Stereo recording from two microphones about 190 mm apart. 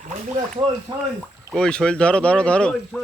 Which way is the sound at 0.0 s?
40° right (ahead or behind).